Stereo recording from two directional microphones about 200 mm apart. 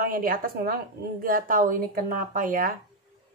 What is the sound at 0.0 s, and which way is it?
Speech, 45° right (ahead or behind).